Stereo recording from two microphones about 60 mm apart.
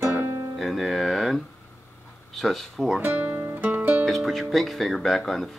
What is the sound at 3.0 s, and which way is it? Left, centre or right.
Speech, right.